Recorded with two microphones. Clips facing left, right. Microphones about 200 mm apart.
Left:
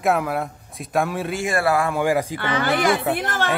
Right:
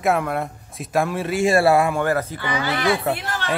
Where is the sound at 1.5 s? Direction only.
25° right (ahead or behind).